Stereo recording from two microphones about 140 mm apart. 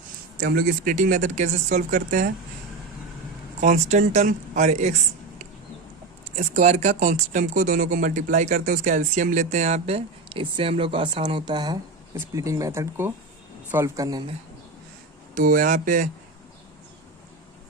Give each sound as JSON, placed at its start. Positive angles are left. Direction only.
{"t": 0.3, "sound": "speech", "side_deg": -80}
{"t": 3.6, "sound": "speech", "side_deg": -60}
{"t": 6.6, "sound": "speech", "side_deg": -55}
{"t": 12.1, "sound": "speech", "side_deg": -20}
{"t": 15.4, "sound": "speech", "side_deg": -75}